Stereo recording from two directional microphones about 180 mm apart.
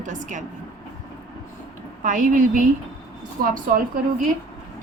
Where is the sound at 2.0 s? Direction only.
45° right (ahead or behind).